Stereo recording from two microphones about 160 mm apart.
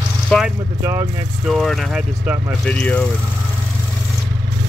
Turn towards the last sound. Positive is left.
turn(degrees=5)  # may be behind; listen again after turning